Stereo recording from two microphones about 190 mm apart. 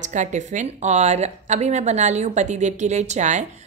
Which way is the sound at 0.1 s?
40° right (ahead or behind).